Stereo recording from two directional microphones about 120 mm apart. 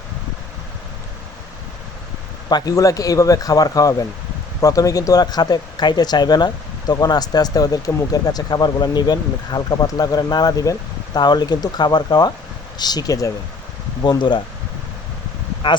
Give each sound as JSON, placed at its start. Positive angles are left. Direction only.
{"t": 2.5, "sound": "speech", "side_deg": 35}
{"t": 15.6, "sound": "speech", "side_deg": 40}